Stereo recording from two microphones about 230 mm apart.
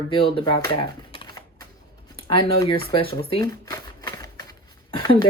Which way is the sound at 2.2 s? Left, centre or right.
Left.